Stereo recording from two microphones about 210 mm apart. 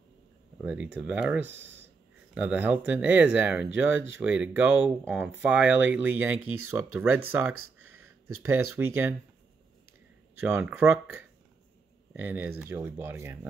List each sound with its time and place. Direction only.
0.7 s speech: 5° right (ahead or behind)
7.5 s a sound: 85° right
8.4 s speech: 10° right (ahead or behind)
10.4 s speech: 10° right (ahead or behind)